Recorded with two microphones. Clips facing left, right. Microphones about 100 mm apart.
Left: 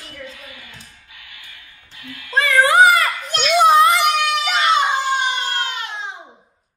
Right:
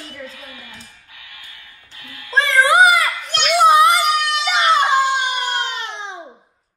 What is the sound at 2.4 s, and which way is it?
Cat, 20° right (ahead or behind).